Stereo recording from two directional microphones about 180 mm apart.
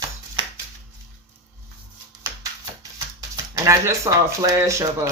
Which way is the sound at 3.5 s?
15° right (ahead or behind).